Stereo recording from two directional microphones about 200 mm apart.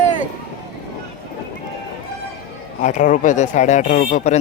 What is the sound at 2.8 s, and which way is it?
Speech, 40° left (ahead or behind).